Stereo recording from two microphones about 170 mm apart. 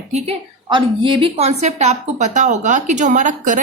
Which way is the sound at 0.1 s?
30° right (ahead or behind).